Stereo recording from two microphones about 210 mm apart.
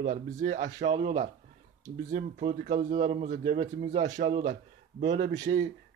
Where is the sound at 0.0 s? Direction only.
35° right (ahead or behind).